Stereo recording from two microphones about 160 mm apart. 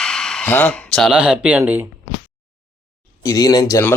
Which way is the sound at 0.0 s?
5° left (ahead or behind).